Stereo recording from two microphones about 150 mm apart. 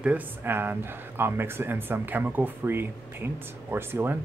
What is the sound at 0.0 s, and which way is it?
A man's voice, 10° right (ahead or behind).